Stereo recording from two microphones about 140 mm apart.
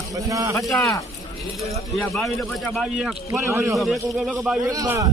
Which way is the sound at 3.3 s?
20° right (ahead or behind).